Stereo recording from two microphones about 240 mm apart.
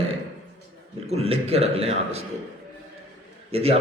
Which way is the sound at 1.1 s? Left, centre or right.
Right.